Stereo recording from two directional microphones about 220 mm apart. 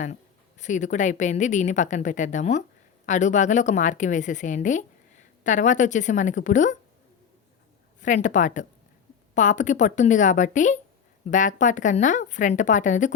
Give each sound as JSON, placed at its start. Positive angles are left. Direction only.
{"t": 0.6, "sound": "a woman's voice", "side_deg": 35}
{"t": 8.0, "sound": "a woman's voice", "side_deg": 35}